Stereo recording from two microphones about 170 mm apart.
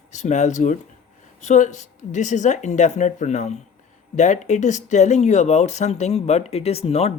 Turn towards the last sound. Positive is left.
turn(degrees=35)  # may be behind; listen again after turning